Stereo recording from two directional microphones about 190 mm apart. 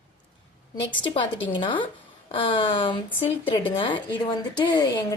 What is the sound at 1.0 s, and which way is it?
A woman's voice, 25° left (ahead or behind).